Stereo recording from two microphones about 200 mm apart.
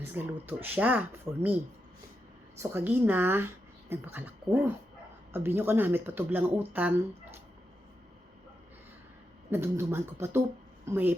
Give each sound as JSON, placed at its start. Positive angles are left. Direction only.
{"t": 0.0, "sound": "speech", "side_deg": -10}
{"t": 2.6, "sound": "speech", "side_deg": -10}
{"t": 9.5, "sound": "speech", "side_deg": -10}